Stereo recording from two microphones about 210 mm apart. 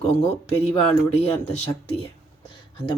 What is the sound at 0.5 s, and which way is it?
Speech, 30° left (ahead or behind).